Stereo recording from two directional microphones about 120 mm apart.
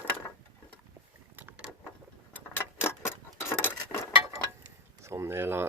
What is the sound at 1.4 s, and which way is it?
Vehicle, 15° right (ahead or behind).